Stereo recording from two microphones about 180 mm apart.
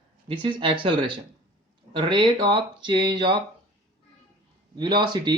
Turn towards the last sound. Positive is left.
turn(degrees=-25)  # may be behind; listen again after turning